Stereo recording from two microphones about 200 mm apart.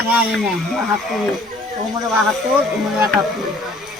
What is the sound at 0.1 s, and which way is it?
Speech, 10° right (ahead or behind).